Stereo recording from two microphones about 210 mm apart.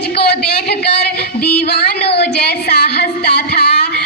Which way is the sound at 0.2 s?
50° left (ahead or behind).